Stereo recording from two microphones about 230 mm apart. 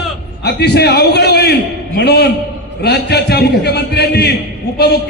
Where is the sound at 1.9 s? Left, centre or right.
Left.